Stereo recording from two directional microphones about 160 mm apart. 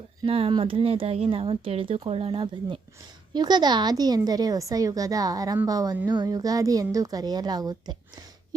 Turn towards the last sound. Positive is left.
turn(degrees=-25)  # may be behind; listen again after turning